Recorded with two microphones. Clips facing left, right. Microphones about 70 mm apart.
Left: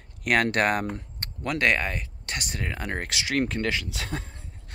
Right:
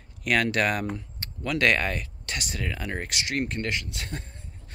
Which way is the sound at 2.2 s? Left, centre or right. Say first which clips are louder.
Even; left.